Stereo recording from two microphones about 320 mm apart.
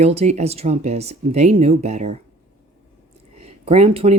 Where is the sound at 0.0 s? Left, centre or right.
Centre.